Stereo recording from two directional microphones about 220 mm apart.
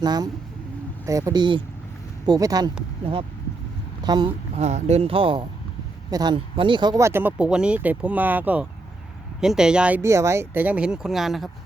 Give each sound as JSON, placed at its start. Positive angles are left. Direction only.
{"t": 0.0, "sound": "speech", "side_deg": -20}
{"t": 4.0, "sound": "speech", "side_deg": -20}
{"t": 4.5, "sound": "speech", "side_deg": -30}